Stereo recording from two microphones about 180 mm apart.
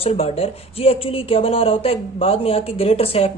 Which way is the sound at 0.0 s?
35° left (ahead or behind).